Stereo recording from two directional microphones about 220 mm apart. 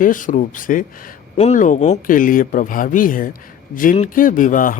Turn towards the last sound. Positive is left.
turn(degrees=40)  # may be behind; listen again after turning